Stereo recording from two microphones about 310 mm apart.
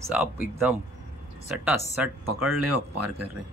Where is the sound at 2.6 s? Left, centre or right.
Right.